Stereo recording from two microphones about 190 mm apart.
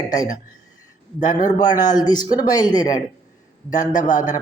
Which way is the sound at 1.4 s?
20° left (ahead or behind).